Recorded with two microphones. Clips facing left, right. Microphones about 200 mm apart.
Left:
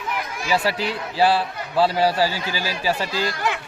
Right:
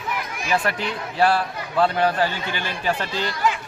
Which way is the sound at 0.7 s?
35° left (ahead or behind).